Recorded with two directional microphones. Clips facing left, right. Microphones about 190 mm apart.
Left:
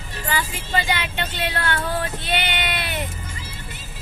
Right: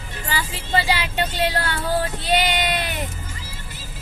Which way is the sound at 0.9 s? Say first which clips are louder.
Right 3 dB; 35° right (ahead or behind).